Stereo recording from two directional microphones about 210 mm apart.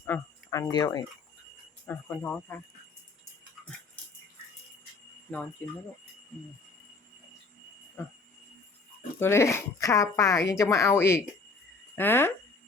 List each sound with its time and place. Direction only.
0.0 s a sound: 10° left (ahead or behind)
1.9 s speech: 10° left (ahead or behind)
5.6 s speech: 10° left (ahead or behind)
8.0 s speech: 10° left (ahead or behind)
9.1 s speech: 10° left (ahead or behind)